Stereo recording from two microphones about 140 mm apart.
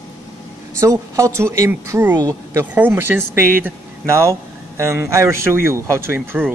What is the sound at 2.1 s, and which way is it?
Speech, 25° right (ahead or behind).